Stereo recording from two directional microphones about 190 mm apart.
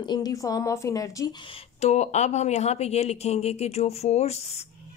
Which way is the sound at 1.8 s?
35° left (ahead or behind).